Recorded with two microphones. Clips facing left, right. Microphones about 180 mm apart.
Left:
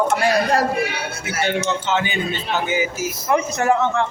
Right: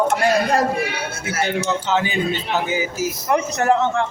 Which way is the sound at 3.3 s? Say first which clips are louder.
Even; 45° right (ahead or behind).